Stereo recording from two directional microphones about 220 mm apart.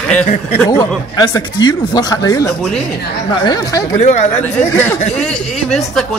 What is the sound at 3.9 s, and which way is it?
Speech, 30° left (ahead or behind).